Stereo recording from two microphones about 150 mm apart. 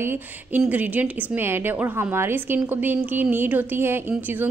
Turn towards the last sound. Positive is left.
turn(degrees=-10)  # may be behind; listen again after turning